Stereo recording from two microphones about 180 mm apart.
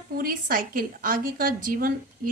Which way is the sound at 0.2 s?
50° right (ahead or behind).